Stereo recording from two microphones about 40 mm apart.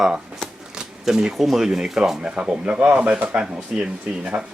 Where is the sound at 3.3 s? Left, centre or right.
Right.